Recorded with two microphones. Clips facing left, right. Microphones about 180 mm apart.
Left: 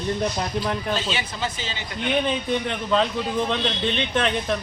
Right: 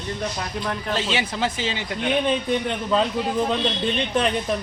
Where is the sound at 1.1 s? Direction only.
75° right (ahead or behind).